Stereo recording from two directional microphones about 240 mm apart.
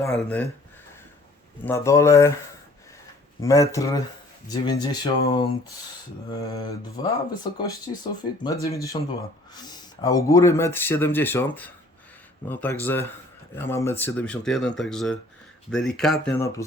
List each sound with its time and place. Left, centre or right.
0.0 s speech: centre
1.6 s speech: centre
3.4 s speech: centre
6.5 s speech: centre
16.4 s speech: centre